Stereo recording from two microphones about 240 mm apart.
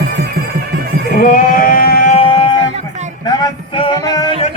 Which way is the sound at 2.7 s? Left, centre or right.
Right.